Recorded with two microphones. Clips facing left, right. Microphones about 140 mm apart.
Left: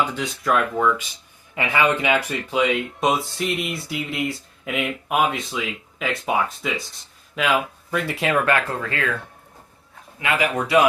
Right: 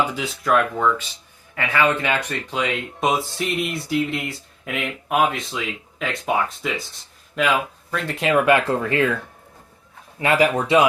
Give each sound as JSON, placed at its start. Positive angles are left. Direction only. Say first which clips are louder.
{"t": 0.0, "sound": "speech", "louder": "right 1 dB", "side_deg": -5}
{"t": 1.5, "sound": "speech", "louder": "even", "side_deg": 15}
{"t": 8.4, "sound": "speech", "louder": "right 4 dB", "side_deg": -20}
{"t": 10.2, "sound": "speech", "louder": "right 5 dB", "side_deg": -35}